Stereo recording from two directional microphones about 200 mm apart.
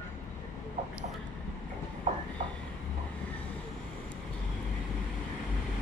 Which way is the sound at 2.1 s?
35° right (ahead or behind).